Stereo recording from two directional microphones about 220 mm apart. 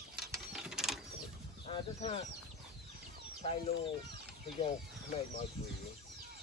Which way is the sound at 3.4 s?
30° left (ahead or behind).